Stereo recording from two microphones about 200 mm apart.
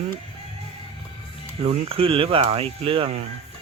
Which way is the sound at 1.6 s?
30° right (ahead or behind).